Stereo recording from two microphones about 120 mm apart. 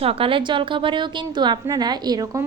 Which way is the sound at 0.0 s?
50° right (ahead or behind).